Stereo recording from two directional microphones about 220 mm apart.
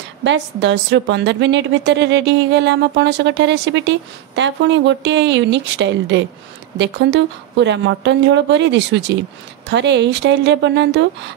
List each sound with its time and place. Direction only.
0.2 s a woman's voice: 55° right (ahead or behind)